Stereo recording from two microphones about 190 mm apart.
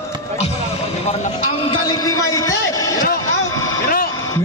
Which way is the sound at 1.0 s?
35° left (ahead or behind).